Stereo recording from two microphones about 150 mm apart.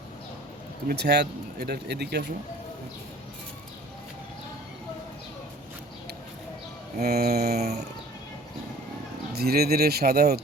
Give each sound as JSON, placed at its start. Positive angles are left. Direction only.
{"t": 0.9, "sound": "speech", "side_deg": -90}
{"t": 7.0, "sound": "speech", "side_deg": -90}
{"t": 9.3, "sound": "speech", "side_deg": -90}